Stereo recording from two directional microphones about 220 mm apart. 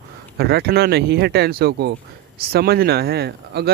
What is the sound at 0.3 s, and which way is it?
Speech, 45° right (ahead or behind).